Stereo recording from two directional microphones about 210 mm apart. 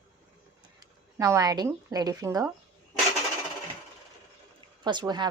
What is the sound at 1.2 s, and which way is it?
A woman's voice, 15° right (ahead or behind).